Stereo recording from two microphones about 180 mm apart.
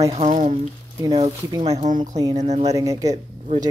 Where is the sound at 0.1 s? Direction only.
40° right (ahead or behind).